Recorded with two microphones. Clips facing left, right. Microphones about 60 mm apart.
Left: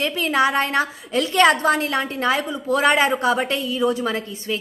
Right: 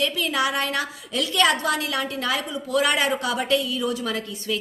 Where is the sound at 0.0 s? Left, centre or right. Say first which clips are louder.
Left 4 dB; left.